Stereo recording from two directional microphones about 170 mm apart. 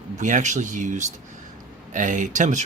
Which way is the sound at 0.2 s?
45° right (ahead or behind).